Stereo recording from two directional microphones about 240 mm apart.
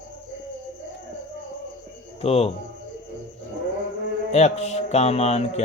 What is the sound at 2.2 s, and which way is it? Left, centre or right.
Mantra, left.